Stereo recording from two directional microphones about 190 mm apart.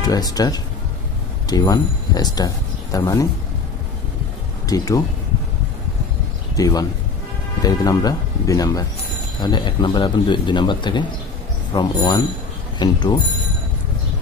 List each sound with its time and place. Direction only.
0.0 s speech: 20° left (ahead or behind)
4.6 s speech: 20° left (ahead or behind)
6.5 s speech: 20° left (ahead or behind)